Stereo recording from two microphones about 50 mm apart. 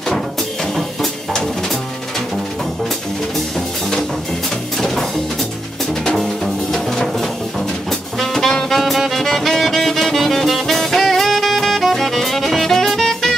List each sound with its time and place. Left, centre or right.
4.7 s music: centre
6.1 s music: centre